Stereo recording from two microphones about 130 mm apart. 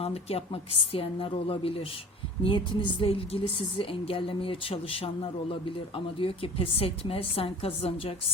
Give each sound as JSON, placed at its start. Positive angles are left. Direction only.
{"t": 0.0, "sound": "a woman's voice", "side_deg": 50}